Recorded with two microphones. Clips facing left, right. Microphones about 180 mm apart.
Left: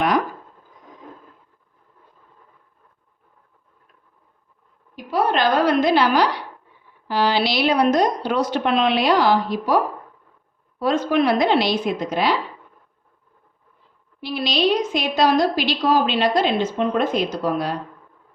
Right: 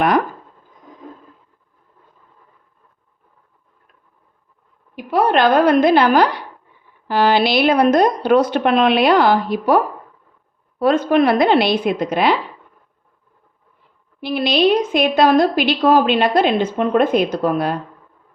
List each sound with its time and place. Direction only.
4.9 s a woman's voice: 60° right (ahead or behind)
14.2 s a woman's voice: 55° right (ahead or behind)